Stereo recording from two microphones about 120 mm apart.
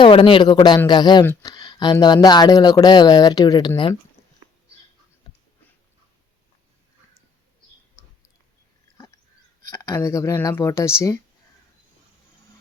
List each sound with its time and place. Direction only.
0.0 s a man's voice: 50° left (ahead or behind)
9.7 s speech: 25° left (ahead or behind)